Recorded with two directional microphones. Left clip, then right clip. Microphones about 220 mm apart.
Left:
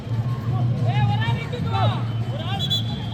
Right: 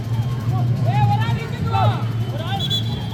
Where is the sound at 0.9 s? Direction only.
20° left (ahead or behind).